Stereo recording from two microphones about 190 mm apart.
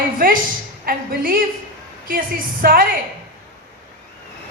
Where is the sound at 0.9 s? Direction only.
50° right (ahead or behind).